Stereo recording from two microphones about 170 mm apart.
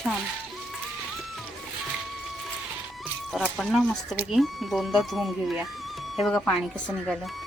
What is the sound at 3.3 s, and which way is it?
Speech, centre (ahead or behind).